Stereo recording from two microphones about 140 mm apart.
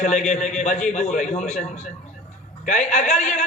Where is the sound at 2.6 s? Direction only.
55° left (ahead or behind).